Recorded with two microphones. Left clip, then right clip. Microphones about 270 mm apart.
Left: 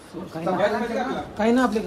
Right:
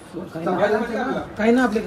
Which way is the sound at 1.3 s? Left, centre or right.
Centre.